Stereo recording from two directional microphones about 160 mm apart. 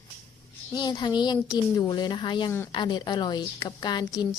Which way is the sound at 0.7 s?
25° left (ahead or behind).